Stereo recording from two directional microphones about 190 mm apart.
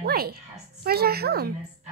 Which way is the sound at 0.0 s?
55° right (ahead or behind).